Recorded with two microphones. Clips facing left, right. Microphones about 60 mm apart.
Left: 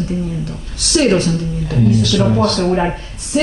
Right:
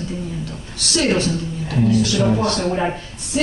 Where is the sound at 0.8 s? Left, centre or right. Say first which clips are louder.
Left 5 dB; left.